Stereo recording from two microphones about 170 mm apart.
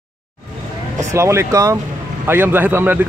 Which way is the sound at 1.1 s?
15° right (ahead or behind).